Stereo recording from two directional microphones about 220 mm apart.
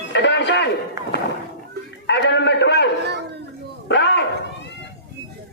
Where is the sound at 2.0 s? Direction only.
55° left (ahead or behind).